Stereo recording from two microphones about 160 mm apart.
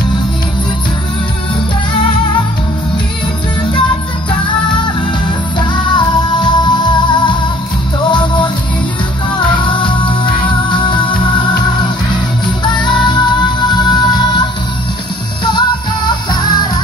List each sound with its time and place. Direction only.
5.7 s music: 30° left (ahead or behind)
9.7 s music: 30° left (ahead or behind)
16.1 s music: 25° left (ahead or behind)